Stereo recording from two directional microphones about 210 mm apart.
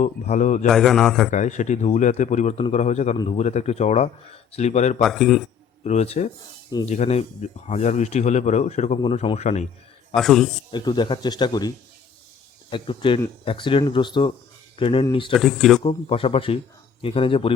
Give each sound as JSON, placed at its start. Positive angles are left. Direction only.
{"t": 0.0, "sound": "speech", "side_deg": 35}
{"t": 0.7, "sound": "a man's voice", "side_deg": 0}
{"t": 1.3, "sound": "speech", "side_deg": 35}
{"t": 4.9, "sound": "a man's voice", "side_deg": 0}
{"t": 5.8, "sound": "speech", "side_deg": 30}
{"t": 10.2, "sound": "a man's voice", "side_deg": 0}
{"t": 10.7, "sound": "speech", "side_deg": 20}
{"t": 12.7, "sound": "speech", "side_deg": 25}
{"t": 15.3, "sound": "a man's voice", "side_deg": 0}
{"t": 15.8, "sound": "speech", "side_deg": 25}